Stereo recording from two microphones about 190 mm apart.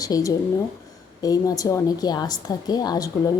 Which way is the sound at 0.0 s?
20° left (ahead or behind).